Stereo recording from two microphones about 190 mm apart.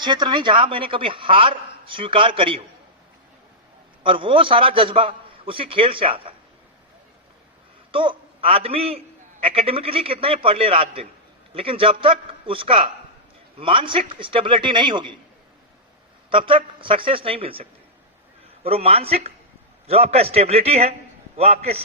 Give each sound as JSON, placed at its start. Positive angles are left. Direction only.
{"t": 0.0, "sound": "a man's voice", "side_deg": -25}
{"t": 4.0, "sound": "a man's voice", "side_deg": -25}
{"t": 7.9, "sound": "a man's voice", "side_deg": -30}
{"t": 16.3, "sound": "a man's voice", "side_deg": -25}
{"t": 18.6, "sound": "a man's voice", "side_deg": -30}